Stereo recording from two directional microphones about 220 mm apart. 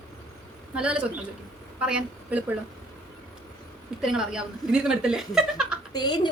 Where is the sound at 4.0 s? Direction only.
5° right (ahead or behind).